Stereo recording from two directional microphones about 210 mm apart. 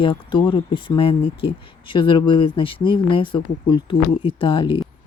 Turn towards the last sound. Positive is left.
turn(degrees=25)  # may be behind; listen again after turning